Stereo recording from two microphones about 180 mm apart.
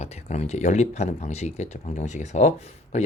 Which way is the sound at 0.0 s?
40° left (ahead or behind).